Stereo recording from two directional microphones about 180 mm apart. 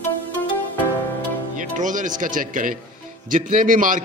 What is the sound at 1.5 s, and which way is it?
A man's voice, 45° right (ahead or behind).